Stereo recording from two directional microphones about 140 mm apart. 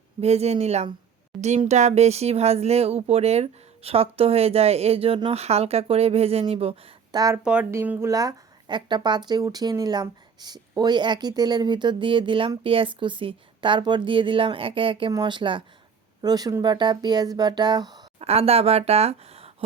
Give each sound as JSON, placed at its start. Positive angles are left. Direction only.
{"t": 0.2, "sound": "speech", "side_deg": -50}
{"t": 7.1, "sound": "speech", "side_deg": -30}
{"t": 7.4, "sound": "speech", "side_deg": -10}
{"t": 18.2, "sound": "speech", "side_deg": -45}